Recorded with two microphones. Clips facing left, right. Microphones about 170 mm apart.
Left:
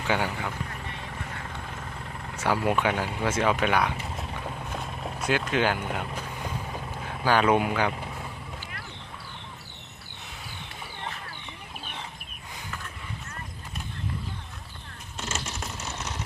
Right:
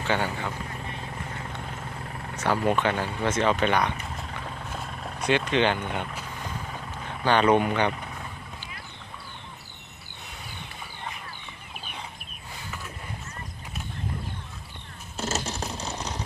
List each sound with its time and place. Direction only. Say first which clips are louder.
0.0 s speech: even; 10° left (ahead or behind)
2.3 s speech: right 1 dB; 10° left (ahead or behind)
6.1 s vehicle: left 2 dB; 10° left (ahead or behind)
7.0 s speech: right 1 dB; 5° left (ahead or behind)
15.2 s a sound: right 5 dB; 40° right (ahead or behind)